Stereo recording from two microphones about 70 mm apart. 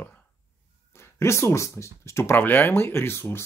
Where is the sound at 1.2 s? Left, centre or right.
Left.